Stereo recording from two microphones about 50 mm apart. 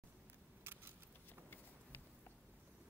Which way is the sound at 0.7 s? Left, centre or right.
Right.